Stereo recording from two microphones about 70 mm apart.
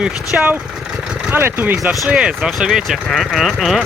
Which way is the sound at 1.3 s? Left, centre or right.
Right.